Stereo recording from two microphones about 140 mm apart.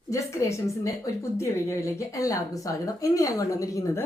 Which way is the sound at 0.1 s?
20° left (ahead or behind).